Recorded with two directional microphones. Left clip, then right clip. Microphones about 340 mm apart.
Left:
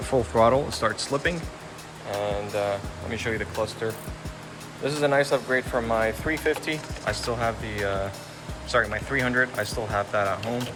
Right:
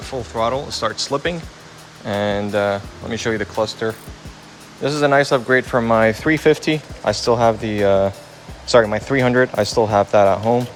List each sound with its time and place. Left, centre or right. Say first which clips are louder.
0.0 s speech: left 1 dB; centre
2.2 s speech: right 8 dB; right